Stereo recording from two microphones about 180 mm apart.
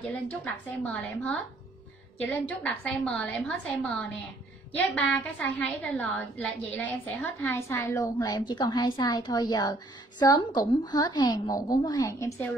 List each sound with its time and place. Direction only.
0.5 s a woman's voice: 5° left (ahead or behind)